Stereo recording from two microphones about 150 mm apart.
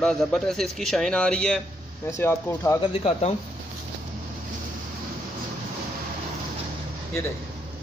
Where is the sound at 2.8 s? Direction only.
40° left (ahead or behind).